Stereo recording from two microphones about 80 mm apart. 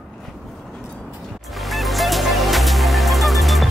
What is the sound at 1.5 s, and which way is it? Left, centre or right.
Music, centre.